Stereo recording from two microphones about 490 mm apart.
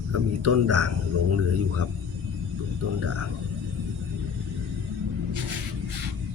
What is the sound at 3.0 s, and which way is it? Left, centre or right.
Speech, right.